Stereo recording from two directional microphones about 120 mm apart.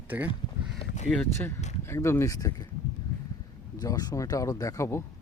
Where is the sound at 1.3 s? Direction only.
20° left (ahead or behind).